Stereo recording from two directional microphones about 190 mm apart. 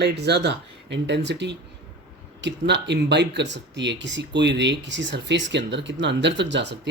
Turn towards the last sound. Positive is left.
turn(degrees=-65)  # may be behind; listen again after turning